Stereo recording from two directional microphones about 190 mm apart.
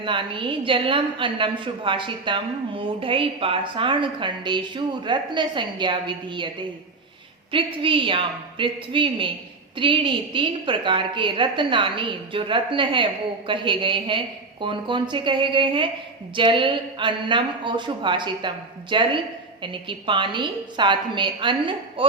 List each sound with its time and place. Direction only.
0.0 s a woman's voice: 25° right (ahead or behind)
7.5 s a woman's voice: 25° right (ahead or behind)